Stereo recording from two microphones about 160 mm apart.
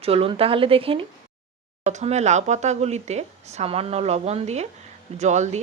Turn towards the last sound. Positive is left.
turn(degrees=-45)  # may be behind; listen again after turning